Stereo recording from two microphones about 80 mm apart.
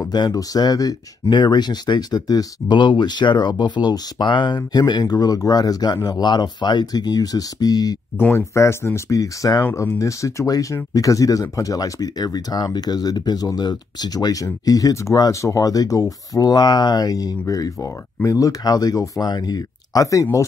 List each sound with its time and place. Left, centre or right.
0.1 s speech: left
1.3 s speech: left
2.8 s speech: left
8.2 s speech: left